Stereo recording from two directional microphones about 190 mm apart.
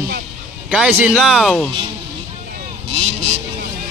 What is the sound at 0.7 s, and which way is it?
Speech, 5° right (ahead or behind).